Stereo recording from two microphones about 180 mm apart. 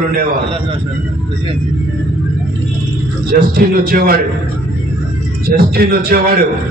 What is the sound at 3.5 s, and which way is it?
Speech, 55° right (ahead or behind).